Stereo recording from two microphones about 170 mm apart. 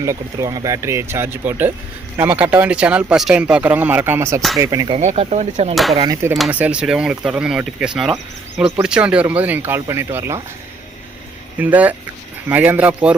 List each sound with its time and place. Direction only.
0.0 s speech: 20° right (ahead or behind)
4.9 s speech: 40° right (ahead or behind)
5.7 s speech: centre (ahead or behind); by 10.4 s 15° right (ahead or behind)
11.5 s speech: 10° right (ahead or behind)